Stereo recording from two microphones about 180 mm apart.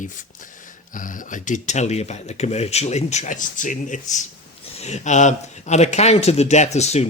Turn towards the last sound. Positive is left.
turn(degrees=40)  # may be behind; listen again after turning